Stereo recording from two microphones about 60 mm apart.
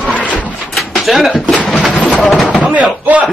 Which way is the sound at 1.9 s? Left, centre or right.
Left.